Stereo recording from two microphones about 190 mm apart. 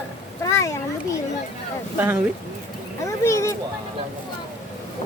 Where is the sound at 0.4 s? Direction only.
15° left (ahead or behind).